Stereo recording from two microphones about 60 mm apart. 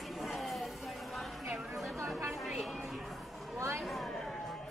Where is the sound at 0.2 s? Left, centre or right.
Centre.